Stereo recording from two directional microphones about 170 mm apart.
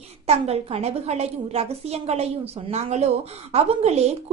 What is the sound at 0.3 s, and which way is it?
A woman's voice, 35° right (ahead or behind).